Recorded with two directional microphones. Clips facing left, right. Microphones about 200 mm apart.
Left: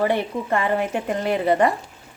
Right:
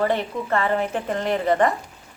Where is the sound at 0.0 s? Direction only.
15° left (ahead or behind).